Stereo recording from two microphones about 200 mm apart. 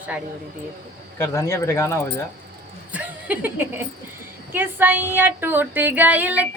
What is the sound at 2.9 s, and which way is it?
Speech, 5° right (ahead or behind).